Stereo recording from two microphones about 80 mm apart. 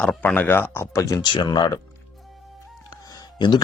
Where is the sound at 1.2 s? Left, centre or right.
Left.